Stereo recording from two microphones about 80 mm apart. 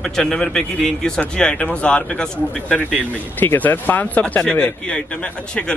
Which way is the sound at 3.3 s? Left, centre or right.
Left.